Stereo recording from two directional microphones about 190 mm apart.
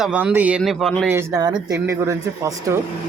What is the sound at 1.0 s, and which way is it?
Speech, 15° right (ahead or behind).